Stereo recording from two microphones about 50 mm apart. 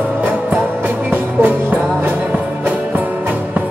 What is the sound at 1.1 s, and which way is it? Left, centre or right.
Music, right.